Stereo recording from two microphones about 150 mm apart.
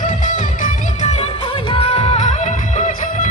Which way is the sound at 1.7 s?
40° left (ahead or behind).